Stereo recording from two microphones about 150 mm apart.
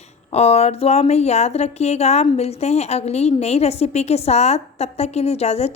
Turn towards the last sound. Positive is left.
turn(degrees=45)  # may be behind; listen again after turning